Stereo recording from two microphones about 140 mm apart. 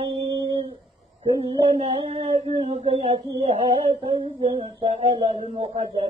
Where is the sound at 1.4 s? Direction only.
45° right (ahead or behind).